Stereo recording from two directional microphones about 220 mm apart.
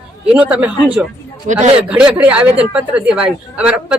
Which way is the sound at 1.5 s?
30° right (ahead or behind).